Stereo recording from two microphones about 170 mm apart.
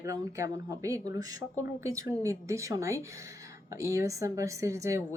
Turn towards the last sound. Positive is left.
turn(degrees=-20)  # may be behind; listen again after turning